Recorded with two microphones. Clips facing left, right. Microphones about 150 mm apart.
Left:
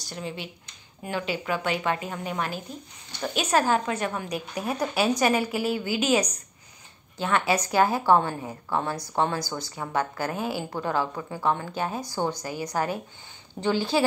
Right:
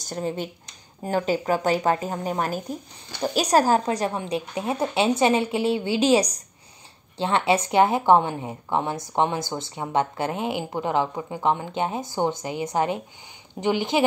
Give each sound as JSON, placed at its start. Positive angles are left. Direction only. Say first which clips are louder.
{"t": 0.0, "sound": "a woman's voice", "louder": "right 7 dB", "side_deg": -45}